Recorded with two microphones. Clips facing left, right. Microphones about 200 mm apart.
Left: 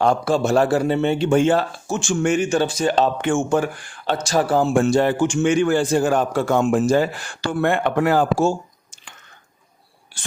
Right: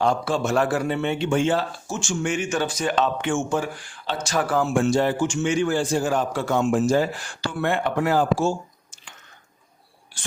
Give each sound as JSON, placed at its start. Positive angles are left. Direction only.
{"t": 0.0, "sound": "a man's voice", "side_deg": 55}
{"t": 0.4, "sound": "a man's voice", "side_deg": 30}
{"t": 2.5, "sound": "a man's voice", "side_deg": 30}
{"t": 4.2, "sound": "a man's voice", "side_deg": 35}
{"t": 4.7, "sound": "a man's voice", "side_deg": 50}
{"t": 7.5, "sound": "a man's voice", "side_deg": 50}
{"t": 7.9, "sound": "a man's voice", "side_deg": 65}